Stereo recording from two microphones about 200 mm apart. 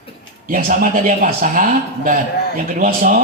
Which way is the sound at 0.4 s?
40° right (ahead or behind).